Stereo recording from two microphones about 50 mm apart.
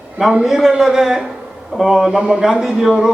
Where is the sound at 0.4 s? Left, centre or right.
Centre.